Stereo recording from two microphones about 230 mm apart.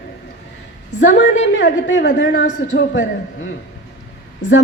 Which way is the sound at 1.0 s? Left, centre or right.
Left.